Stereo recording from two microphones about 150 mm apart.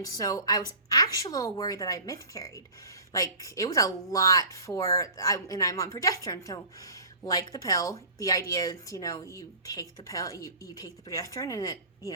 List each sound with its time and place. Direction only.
0.0 s a woman's voice: 25° left (ahead or behind)